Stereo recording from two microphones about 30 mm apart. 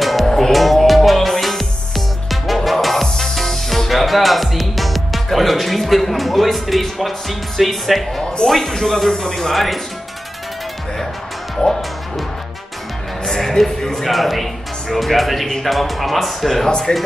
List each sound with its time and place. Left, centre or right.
0.0 s music: centre
8.5 s speech: centre
11.5 s music: centre
13.2 s music: centre
14.0 s speech: centre
16.6 s speech: centre